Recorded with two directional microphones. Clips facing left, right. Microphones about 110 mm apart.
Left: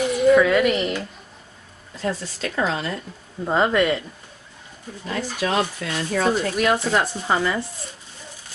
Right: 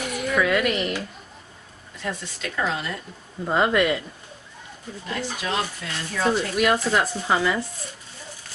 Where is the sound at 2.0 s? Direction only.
35° left (ahead or behind).